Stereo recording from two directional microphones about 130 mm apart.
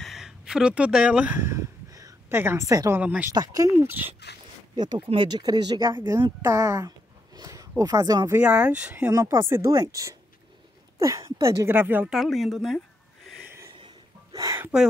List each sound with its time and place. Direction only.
0.0 s a sound: 5° right (ahead or behind); by 3.0 s 25° right (ahead or behind)
3.0 s speech: 10° right (ahead or behind)
3.3 s speech: 25° right (ahead or behind)
4.7 s speech: 35° right (ahead or behind)
5.9 s speech: 20° right (ahead or behind)
8.4 s speech: 10° right (ahead or behind)
9.1 s speech: 25° right (ahead or behind)
12.1 s speech: centre (ahead or behind)
13.4 s a sound: 15° right (ahead or behind)
13.7 s a sound: 30° right (ahead or behind)